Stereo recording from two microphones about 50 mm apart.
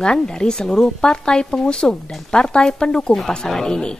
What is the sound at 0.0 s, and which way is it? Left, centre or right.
A woman's voice, centre.